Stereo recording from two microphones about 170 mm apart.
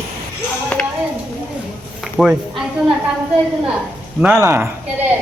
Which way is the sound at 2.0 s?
5° right (ahead or behind).